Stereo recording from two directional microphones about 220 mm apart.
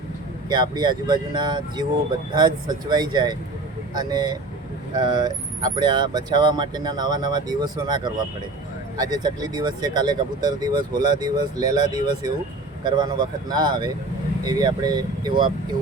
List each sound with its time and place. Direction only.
0.4 s speech: 20° right (ahead or behind)